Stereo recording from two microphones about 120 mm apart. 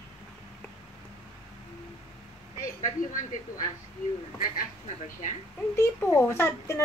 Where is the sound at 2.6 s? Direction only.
90° left.